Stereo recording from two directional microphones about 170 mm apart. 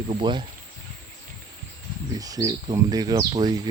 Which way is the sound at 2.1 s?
20° right (ahead or behind).